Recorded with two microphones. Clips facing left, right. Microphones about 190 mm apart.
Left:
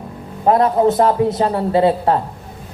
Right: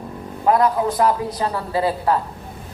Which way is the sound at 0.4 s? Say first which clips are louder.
Left 4 dB; 30° left (ahead or behind).